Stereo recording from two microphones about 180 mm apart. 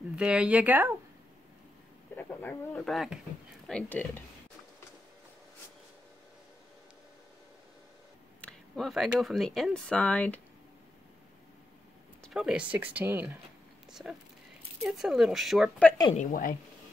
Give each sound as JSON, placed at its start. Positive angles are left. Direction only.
{"t": 0.1, "sound": "speech", "side_deg": -5}
{"t": 2.1, "sound": "speech", "side_deg": 10}
{"t": 8.4, "sound": "speech", "side_deg": 5}
{"t": 12.2, "sound": "speech", "side_deg": 0}
{"t": 16.2, "sound": "speech", "side_deg": 45}